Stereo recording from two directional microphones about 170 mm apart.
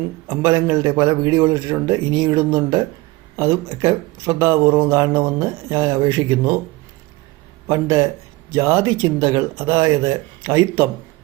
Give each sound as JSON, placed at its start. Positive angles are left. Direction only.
{"t": 0.3, "sound": "speech", "side_deg": -15}
{"t": 7.7, "sound": "speech", "side_deg": -20}